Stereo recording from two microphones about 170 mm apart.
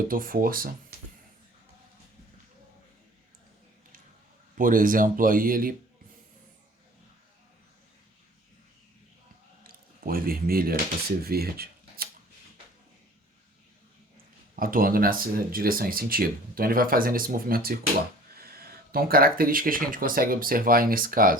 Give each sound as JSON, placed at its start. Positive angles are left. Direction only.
{"t": 0.1, "sound": "speech", "side_deg": -55}
{"t": 4.5, "sound": "speech", "side_deg": -55}
{"t": 9.6, "sound": "a sound", "side_deg": -60}
{"t": 11.2, "sound": "speech", "side_deg": -65}
{"t": 14.5, "sound": "speech", "side_deg": -55}